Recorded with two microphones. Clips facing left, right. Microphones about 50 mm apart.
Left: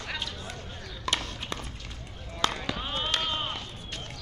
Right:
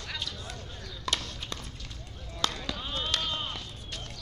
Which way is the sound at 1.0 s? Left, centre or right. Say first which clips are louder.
Left 2 dB; centre.